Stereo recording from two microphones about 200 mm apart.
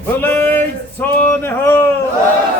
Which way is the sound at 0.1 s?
10° left (ahead or behind).